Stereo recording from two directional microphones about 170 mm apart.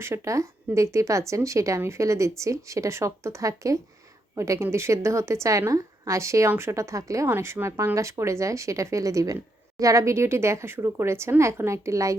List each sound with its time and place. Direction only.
0.0 s a woman's voice: 15° right (ahead or behind)